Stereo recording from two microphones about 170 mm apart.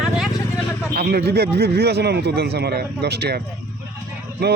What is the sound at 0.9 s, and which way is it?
Speech, 70° right (ahead or behind).